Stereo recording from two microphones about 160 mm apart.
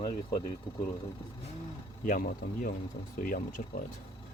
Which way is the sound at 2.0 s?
55° left (ahead or behind).